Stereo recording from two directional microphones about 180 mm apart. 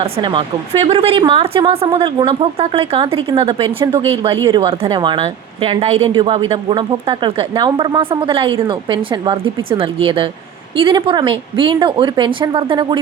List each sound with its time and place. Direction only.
0.0 s a woman's voice: 25° right (ahead or behind)